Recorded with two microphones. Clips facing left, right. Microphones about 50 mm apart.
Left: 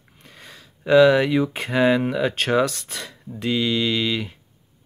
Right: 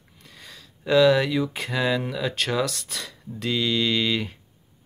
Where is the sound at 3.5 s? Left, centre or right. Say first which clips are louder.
Left 2 dB; centre.